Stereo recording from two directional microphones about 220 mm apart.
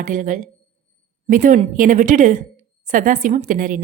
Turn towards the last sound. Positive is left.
turn(degrees=-35)  # may be behind; listen again after turning